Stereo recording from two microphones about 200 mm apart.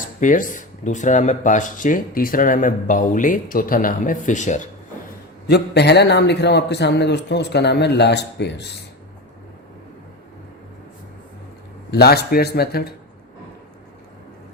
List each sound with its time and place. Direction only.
0.0 s speech: 40° left (ahead or behind)
5.5 s a man's voice: 55° left (ahead or behind)
11.9 s speech: 55° left (ahead or behind)